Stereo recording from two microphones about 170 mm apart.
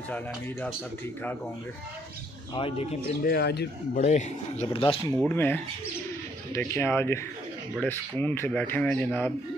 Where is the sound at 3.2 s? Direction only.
75° left (ahead or behind); by 4.7 s 50° left (ahead or behind).